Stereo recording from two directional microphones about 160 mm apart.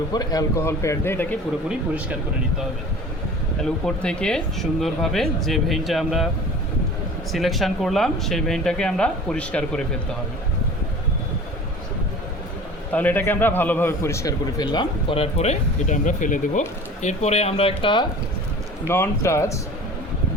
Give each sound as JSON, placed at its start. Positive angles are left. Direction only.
{"t": 0.1, "sound": "a man's voice", "side_deg": 25}
{"t": 3.6, "sound": "speech", "side_deg": 5}
{"t": 7.3, "sound": "speech", "side_deg": 0}
{"t": 12.9, "sound": "a man's voice", "side_deg": 10}
{"t": 18.9, "sound": "a man's voice", "side_deg": 15}